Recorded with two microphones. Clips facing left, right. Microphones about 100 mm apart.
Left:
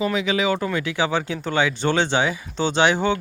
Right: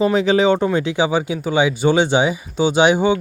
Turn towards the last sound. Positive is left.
turn(degrees=-15)  # may be behind; listen again after turning